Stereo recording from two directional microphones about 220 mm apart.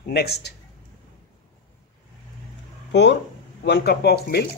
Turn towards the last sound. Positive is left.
turn(degrees=45)  # may be behind; listen again after turning